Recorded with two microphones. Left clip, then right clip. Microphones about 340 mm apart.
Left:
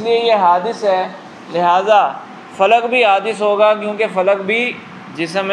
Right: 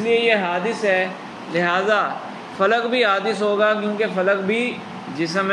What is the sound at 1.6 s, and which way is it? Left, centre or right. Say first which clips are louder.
Speech: left 8 dB; centre.